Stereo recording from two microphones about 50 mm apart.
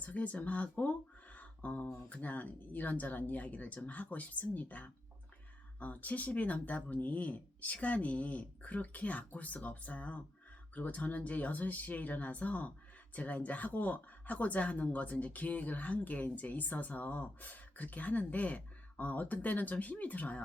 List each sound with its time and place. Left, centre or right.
0.0 s speech: left